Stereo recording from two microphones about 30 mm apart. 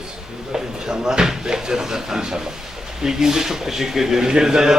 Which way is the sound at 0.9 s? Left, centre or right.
Right.